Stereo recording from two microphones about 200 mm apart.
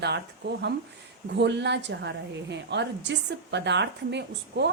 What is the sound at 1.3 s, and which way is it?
A woman's voice, 60° right (ahead or behind).